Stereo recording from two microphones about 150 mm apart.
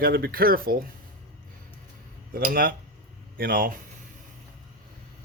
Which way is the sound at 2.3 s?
75° right (ahead or behind).